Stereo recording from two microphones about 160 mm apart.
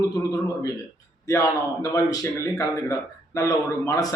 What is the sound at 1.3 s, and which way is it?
A man's voice, 20° left (ahead or behind).